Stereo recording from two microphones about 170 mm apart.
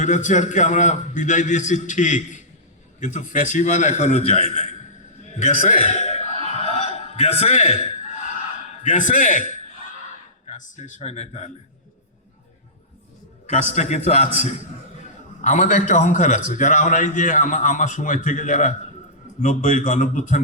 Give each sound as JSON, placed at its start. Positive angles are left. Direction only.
{"t": 0.0, "sound": "a man's voice", "side_deg": 45}
{"t": 5.2, "sound": "chuckle", "side_deg": 45}
{"t": 8.8, "sound": "a man's voice", "side_deg": 45}
{"t": 13.5, "sound": "a man's voice", "side_deg": 40}